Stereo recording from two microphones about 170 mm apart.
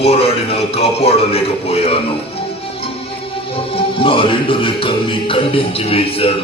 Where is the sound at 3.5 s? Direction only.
30° left (ahead or behind).